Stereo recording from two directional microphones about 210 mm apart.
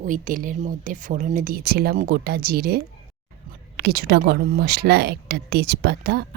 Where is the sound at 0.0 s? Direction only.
40° right (ahead or behind).